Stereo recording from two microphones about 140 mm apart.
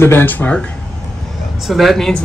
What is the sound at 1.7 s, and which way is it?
Speech, centre (ahead or behind).